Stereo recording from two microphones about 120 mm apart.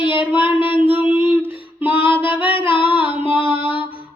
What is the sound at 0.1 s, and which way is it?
Child singing, 15° right (ahead or behind).